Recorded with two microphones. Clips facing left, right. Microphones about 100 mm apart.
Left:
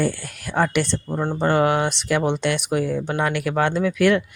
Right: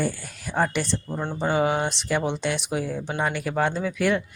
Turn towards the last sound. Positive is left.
turn(degrees=70)  # may be behind; listen again after turning